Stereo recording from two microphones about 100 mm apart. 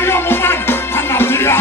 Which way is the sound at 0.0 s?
25° left (ahead or behind).